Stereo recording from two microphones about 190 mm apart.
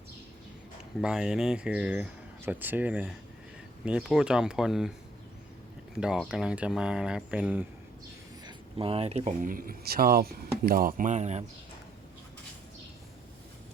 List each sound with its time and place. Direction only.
1.0 s speech: 5° right (ahead or behind)
6.0 s speech: 5° right (ahead or behind)
8.4 s speech: 30° right (ahead or behind)